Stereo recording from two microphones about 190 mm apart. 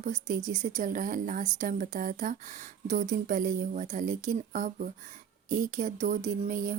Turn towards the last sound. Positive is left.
turn(degrees=-45)  # may be behind; listen again after turning